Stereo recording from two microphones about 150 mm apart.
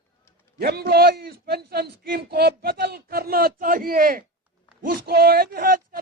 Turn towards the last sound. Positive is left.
turn(degrees=-75)  # may be behind; listen again after turning